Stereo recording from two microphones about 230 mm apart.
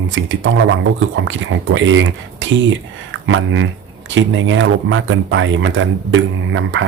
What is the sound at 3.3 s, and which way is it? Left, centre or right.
Speech, right.